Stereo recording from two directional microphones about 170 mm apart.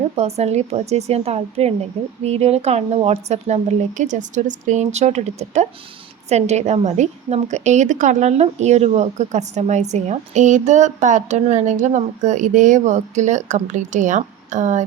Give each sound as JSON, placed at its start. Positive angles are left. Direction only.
{"t": 0.2, "sound": "a woman's voice", "side_deg": -40}